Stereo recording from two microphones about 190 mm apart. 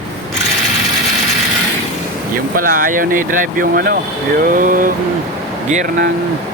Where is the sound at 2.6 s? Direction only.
45° right (ahead or behind).